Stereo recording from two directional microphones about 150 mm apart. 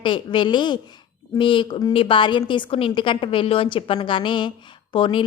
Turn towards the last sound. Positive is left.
turn(degrees=35)  # may be behind; listen again after turning